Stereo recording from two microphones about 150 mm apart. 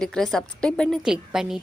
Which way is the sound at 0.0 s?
Centre (ahead or behind).